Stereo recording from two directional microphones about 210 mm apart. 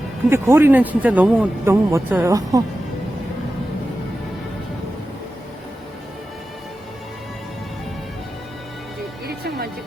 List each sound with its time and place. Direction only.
0.3 s a man's voice: 10° right (ahead or behind)
9.2 s music: 50° right (ahead or behind)